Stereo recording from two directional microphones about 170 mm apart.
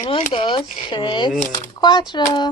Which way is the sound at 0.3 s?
30° left (ahead or behind).